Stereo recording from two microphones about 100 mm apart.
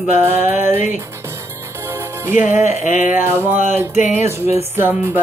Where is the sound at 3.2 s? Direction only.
25° right (ahead or behind).